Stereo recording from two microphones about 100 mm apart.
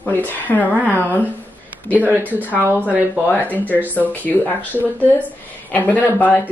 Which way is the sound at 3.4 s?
15° left (ahead or behind).